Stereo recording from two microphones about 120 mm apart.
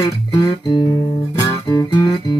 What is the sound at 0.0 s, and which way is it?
Music, 35° left (ahead or behind).